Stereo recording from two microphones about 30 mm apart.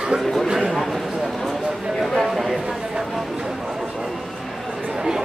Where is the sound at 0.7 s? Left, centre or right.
Centre.